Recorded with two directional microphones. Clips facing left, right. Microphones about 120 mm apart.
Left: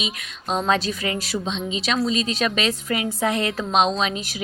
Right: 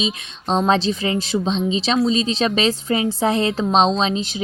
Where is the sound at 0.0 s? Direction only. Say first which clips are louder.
Right 6 dB; 30° right (ahead or behind).